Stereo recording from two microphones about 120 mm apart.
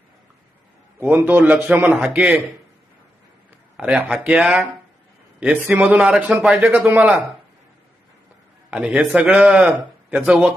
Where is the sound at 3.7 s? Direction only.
5° right (ahead or behind).